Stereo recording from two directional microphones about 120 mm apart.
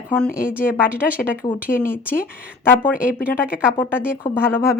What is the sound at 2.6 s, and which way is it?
Speech, 15° left (ahead or behind).